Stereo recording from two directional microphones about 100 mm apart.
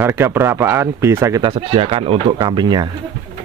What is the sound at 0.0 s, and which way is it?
Speech, 25° right (ahead or behind).